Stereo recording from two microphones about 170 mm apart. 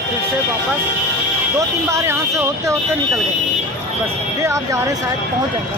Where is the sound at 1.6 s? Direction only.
15° right (ahead or behind).